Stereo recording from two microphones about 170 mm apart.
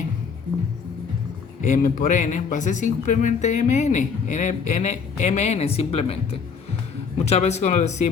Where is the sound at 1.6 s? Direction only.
50° left (ahead or behind).